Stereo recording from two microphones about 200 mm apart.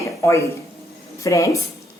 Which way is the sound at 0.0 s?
15° left (ahead or behind).